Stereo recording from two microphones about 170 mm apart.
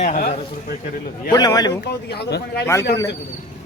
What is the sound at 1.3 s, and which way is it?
Speech, 25° left (ahead or behind).